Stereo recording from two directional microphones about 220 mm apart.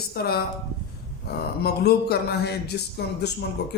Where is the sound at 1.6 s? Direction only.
45° left (ahead or behind).